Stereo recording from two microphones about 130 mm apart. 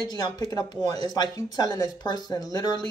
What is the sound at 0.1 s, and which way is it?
Speech, 30° left (ahead or behind).